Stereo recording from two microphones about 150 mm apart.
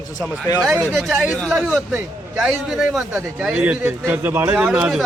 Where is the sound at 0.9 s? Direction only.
5° right (ahead or behind).